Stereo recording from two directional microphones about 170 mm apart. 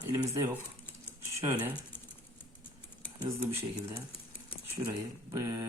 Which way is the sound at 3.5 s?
15° right (ahead or behind).